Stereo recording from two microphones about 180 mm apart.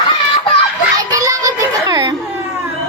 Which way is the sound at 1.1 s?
20° right (ahead or behind).